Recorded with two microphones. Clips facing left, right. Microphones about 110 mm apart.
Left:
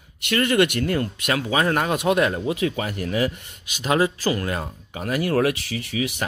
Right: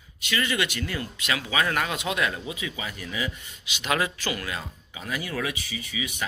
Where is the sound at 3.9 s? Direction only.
35° left (ahead or behind).